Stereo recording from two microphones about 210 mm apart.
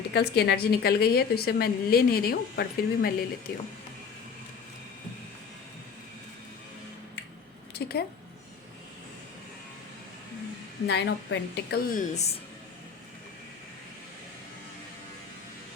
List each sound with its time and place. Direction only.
0.1 s a woman's voice: 50° left (ahead or behind)
7.7 s a sound: 50° left (ahead or behind)
10.8 s a woman's voice: 55° left (ahead or behind); by 12.4 s 30° left (ahead or behind)